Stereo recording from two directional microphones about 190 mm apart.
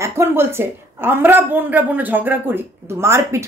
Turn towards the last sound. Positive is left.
turn(degrees=-15)  # may be behind; listen again after turning